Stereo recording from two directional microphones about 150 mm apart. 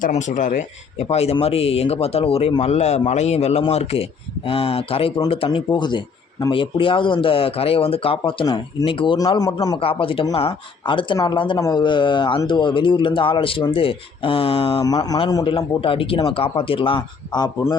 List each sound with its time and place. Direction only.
0.0 s speech: 55° left (ahead or behind)
0.9 s speech: 45° left (ahead or behind); by 9.8 s 25° left (ahead or behind)
9.8 s speech: 35° left (ahead or behind)
14.8 s speech: 25° left (ahead or behind)
15.4 s speech: 35° left (ahead or behind)